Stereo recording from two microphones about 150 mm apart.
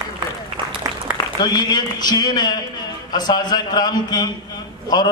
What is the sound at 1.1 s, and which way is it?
A man's voice, 25° left (ahead or behind).